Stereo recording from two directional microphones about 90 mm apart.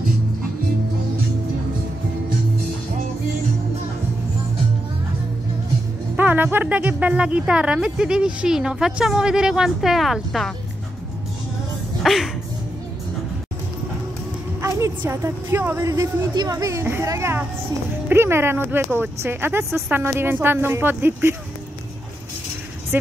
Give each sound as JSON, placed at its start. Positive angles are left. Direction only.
{"t": 6.1, "sound": "speech", "side_deg": -20}
{"t": 12.0, "sound": "speech", "side_deg": 0}
{"t": 14.6, "sound": "a woman's voice", "side_deg": -35}